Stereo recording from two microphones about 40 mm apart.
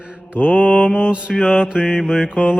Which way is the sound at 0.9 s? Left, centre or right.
Right.